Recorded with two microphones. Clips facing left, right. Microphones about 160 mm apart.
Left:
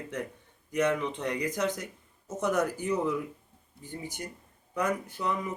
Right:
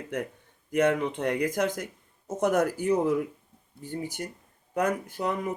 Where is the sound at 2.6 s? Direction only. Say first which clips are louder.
Right 4 dB; 40° right (ahead or behind).